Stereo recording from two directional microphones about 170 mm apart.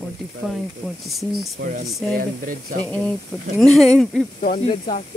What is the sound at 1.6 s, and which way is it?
Speech, 65° right (ahead or behind).